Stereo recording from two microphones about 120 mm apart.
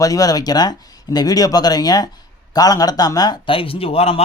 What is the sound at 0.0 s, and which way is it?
A man's voice, 30° left (ahead or behind).